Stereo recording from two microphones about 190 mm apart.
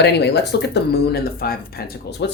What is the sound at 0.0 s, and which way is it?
Speech, 60° left (ahead or behind).